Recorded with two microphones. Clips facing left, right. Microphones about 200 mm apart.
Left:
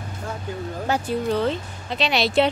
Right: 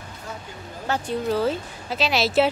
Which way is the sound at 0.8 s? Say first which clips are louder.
Left 2 dB; 10° left (ahead or behind).